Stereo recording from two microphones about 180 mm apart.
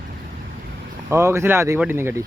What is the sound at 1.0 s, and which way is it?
Speech, 15° right (ahead or behind).